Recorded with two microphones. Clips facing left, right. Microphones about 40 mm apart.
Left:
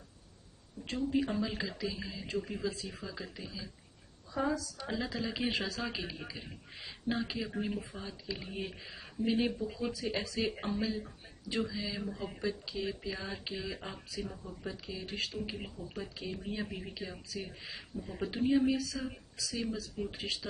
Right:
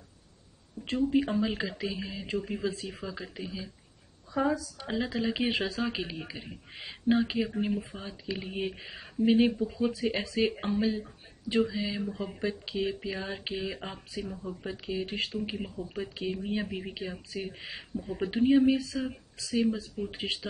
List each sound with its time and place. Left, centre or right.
0.8 s speech: right
2.3 s speech: centre
2.6 s speech: right
3.1 s speech: right
12.0 s speech: centre
12.4 s speech: right
15.3 s speech: centre